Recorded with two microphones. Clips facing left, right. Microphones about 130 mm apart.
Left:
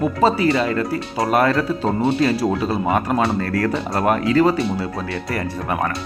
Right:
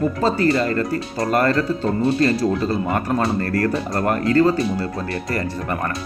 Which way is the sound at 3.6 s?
80° left.